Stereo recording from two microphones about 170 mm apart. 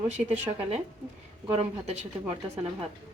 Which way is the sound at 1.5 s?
40° right (ahead or behind).